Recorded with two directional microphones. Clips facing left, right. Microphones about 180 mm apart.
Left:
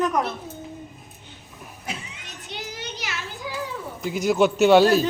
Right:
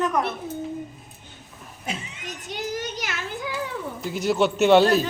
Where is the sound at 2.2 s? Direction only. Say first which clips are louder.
Right 7 dB; 45° right (ahead or behind).